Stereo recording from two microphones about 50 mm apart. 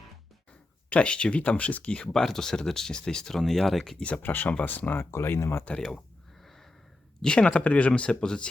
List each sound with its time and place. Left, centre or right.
0.9 s speech: left
2.1 s speech: centre
4.2 s speech: left
5.1 s speech: left
7.2 s speech: centre